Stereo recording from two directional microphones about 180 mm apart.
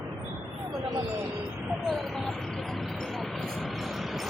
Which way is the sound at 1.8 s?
Centre (ahead or behind).